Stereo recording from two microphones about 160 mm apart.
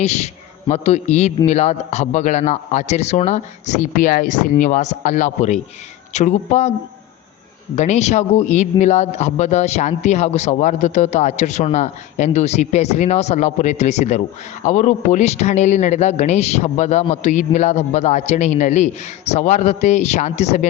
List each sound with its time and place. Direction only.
0.0 s a man's voice: 45° left (ahead or behind)
7.8 s a man's voice: 45° left (ahead or behind)